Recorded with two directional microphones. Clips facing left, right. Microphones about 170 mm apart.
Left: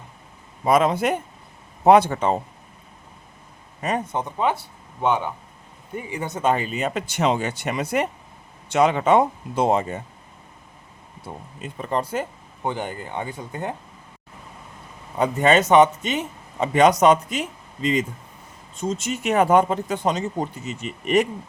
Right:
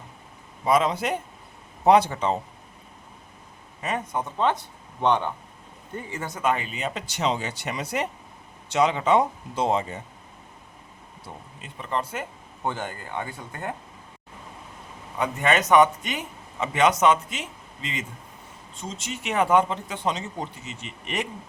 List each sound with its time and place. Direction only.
0.6 s speech: 50° left (ahead or behind)
3.8 s a man's voice: 40° left (ahead or behind)
4.1 s speech: 15° left (ahead or behind)
6.5 s speech: 40° left (ahead or behind)
11.3 s speech: 45° left (ahead or behind)
12.6 s speech: 15° left (ahead or behind)
15.2 s speech: 30° left (ahead or behind)
16.6 s speech: 40° left (ahead or behind)
18.8 s speech: 45° left (ahead or behind)